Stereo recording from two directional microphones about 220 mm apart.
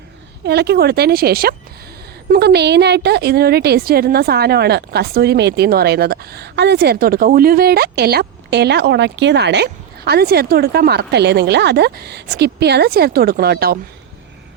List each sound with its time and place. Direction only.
0.4 s a woman's voice: 45° right (ahead or behind)